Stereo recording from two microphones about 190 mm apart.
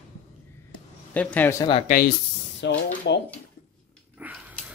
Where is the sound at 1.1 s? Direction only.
10° left (ahead or behind).